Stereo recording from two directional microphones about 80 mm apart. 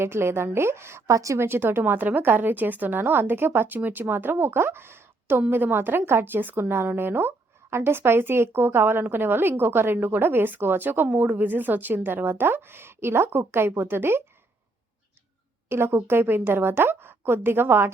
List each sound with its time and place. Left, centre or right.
0.0 s a woman's voice: right
1.5 s a woman's voice: right
15.7 s a woman's voice: right